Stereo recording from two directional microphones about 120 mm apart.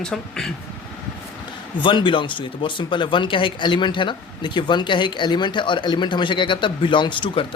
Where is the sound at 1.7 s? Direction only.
40° left (ahead or behind).